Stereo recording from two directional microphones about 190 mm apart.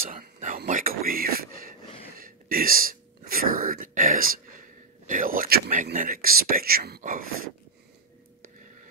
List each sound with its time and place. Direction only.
0.1 s speech: 45° right (ahead or behind)